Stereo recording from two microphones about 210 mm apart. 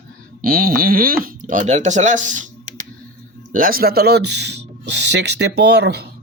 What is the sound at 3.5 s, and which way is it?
Speech, 45° right (ahead or behind).